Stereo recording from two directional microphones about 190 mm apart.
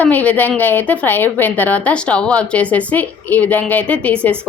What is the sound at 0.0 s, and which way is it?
A woman's voice, 10° left (ahead or behind).